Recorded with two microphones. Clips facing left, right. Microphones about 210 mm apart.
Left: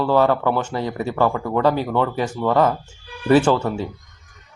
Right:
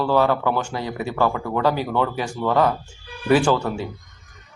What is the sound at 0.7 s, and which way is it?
Speech, 35° left (ahead or behind).